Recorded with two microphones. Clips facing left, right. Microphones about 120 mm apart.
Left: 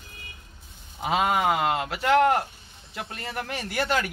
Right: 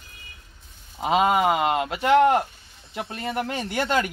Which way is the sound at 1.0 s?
20° right (ahead or behind).